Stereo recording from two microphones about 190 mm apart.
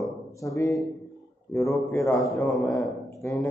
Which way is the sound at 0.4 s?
15° left (ahead or behind).